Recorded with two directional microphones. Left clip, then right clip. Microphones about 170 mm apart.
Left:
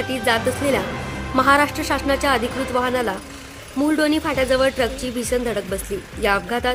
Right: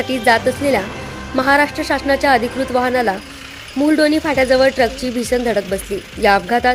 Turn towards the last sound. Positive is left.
turn(degrees=-20)  # may be behind; listen again after turning